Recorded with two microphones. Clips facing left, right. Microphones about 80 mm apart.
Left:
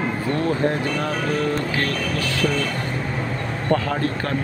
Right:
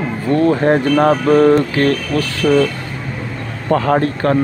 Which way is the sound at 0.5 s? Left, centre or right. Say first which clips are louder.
Right 9 dB; right.